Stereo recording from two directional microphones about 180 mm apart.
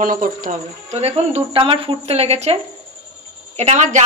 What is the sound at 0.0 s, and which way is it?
Speech, 50° right (ahead or behind).